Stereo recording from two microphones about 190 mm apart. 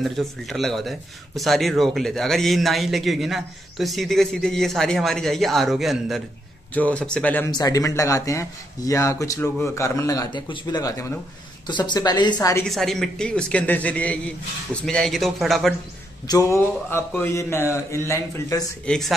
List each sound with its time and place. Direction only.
0.0 s speech: centre (ahead or behind)
7.5 s a woman's voice: 20° left (ahead or behind)
12.6 s speech: centre (ahead or behind)
16.3 s speech: 15° left (ahead or behind)
18.9 s speech: centre (ahead or behind)